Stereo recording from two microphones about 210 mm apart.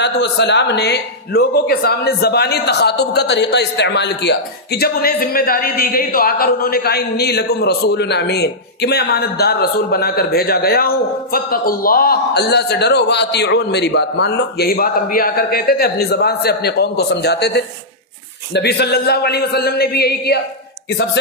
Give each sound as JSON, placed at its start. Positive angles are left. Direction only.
{"t": 0.0, "sound": "a man's voice", "side_deg": 55}